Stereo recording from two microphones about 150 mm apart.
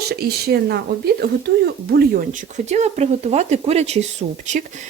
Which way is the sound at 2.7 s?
50° right (ahead or behind).